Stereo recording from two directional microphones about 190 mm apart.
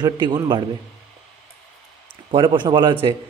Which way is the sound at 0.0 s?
20° right (ahead or behind).